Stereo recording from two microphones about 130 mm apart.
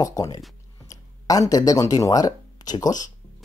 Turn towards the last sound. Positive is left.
turn(degrees=30)  # may be behind; listen again after turning